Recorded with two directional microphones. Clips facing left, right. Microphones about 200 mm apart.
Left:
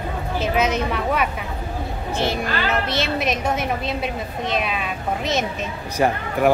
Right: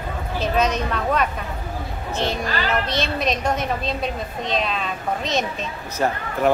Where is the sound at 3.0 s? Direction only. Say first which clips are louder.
Even; 5° left (ahead or behind).